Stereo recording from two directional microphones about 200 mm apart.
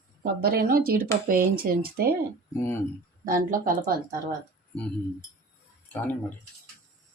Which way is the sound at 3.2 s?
45° right (ahead or behind).